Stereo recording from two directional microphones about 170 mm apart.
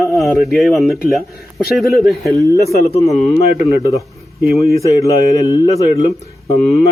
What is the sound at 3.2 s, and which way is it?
A man's voice, 25° left (ahead or behind).